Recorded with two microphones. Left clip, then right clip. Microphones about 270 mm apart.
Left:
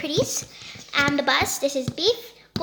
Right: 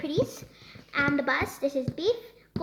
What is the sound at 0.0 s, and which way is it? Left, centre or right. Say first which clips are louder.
A woman's voice: left 4 dB; centre.